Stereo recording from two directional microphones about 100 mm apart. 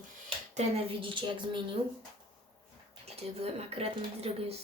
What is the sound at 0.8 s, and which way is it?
Speech, 55° right (ahead or behind).